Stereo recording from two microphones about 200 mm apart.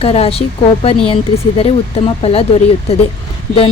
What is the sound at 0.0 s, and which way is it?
Speech, 30° left (ahead or behind).